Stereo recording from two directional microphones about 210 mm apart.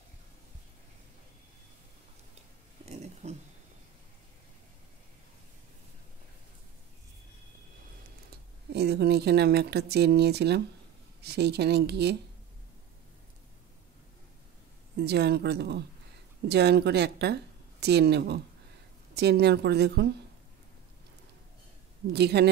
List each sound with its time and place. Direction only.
2.8 s a sound: 30° right (ahead or behind)
8.7 s speech: 50° right (ahead or behind)
15.0 s speech: 50° right (ahead or behind)
22.1 s speech: 50° right (ahead or behind)